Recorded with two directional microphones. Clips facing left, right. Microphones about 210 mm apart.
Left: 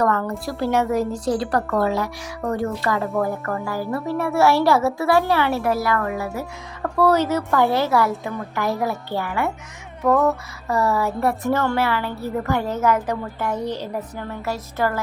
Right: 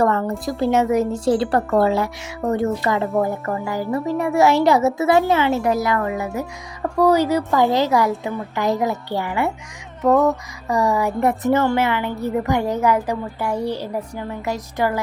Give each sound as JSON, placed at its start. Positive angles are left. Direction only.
{"t": 0.0, "sound": "a woman's voice", "side_deg": -25}